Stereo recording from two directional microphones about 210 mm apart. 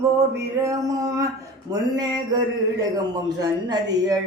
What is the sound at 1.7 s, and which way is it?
Speech, 20° right (ahead or behind).